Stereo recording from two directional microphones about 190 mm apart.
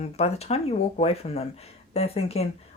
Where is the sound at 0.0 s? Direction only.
35° left (ahead or behind).